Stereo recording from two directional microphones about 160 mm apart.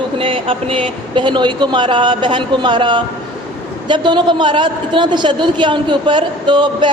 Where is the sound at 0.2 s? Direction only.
35° right (ahead or behind).